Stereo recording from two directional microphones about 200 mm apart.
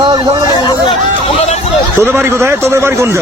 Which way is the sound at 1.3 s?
35° left (ahead or behind).